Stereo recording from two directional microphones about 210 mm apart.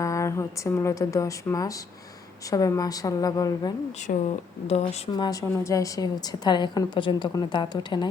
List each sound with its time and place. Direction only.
0.0 s a woman's voice: 15° left (ahead or behind)
4.1 s speech: 35° left (ahead or behind)
5.1 s a woman's voice: 20° left (ahead or behind)